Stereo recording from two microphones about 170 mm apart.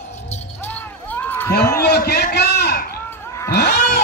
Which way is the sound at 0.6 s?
10° left (ahead or behind).